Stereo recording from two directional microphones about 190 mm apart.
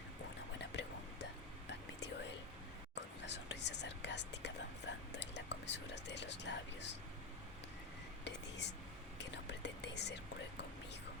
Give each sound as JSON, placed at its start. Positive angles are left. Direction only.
{"t": 0.6, "sound": "whispering", "side_deg": 65}
{"t": 2.9, "sound": "whispering", "side_deg": 65}
{"t": 8.2, "sound": "whispering", "side_deg": 65}